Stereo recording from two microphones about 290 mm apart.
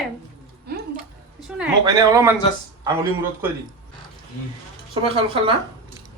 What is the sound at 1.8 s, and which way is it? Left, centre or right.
Speech, centre.